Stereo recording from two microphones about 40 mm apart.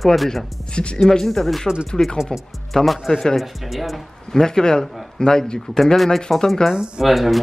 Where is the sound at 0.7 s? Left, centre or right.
Left.